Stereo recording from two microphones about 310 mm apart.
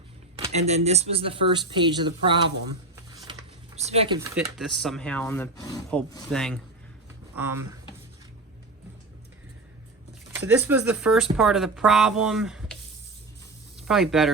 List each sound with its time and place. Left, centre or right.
0.3 s speech: centre
4.4 s speech: centre
10.4 s speech: centre
13.8 s speech: centre